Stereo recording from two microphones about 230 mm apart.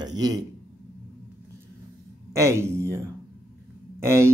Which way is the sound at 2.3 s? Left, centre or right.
Centre.